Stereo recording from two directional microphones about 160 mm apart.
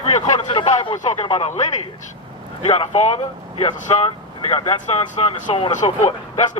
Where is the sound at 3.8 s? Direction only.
45° left (ahead or behind).